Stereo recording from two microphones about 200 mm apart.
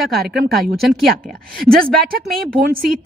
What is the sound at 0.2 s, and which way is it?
Speech, 50° right (ahead or behind).